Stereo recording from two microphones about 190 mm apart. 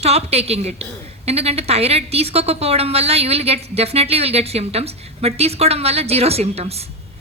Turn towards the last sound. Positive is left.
turn(degrees=-35)  # may be behind; listen again after turning